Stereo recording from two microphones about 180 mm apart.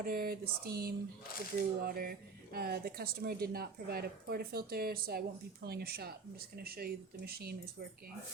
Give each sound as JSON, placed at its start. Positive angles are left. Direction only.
{"t": 0.0, "sound": "speech", "side_deg": -55}